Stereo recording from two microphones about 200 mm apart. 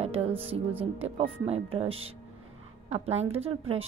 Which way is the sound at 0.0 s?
30° right (ahead or behind).